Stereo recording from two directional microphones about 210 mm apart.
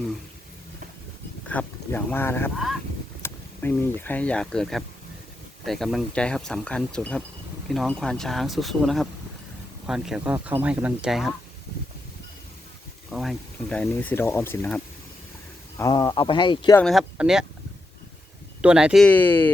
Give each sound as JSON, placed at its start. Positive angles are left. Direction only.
{"t": 1.5, "sound": "speech", "side_deg": 10}
{"t": 13.1, "sound": "speech", "side_deg": 0}
{"t": 15.8, "sound": "speech", "side_deg": 20}
{"t": 16.7, "sound": "speech", "side_deg": 0}
{"t": 18.6, "sound": "speech", "side_deg": -5}